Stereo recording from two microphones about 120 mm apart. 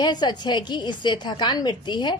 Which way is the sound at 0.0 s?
35° left (ahead or behind).